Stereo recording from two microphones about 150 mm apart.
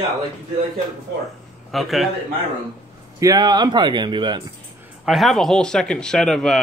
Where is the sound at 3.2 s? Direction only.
25° right (ahead or behind).